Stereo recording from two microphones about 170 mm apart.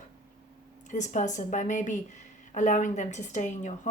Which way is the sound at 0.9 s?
45° left (ahead or behind).